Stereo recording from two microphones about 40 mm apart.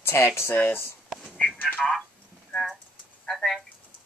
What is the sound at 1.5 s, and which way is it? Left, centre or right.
Telephone, left.